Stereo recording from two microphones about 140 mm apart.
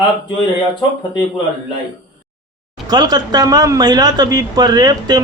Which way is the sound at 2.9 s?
30° right (ahead or behind).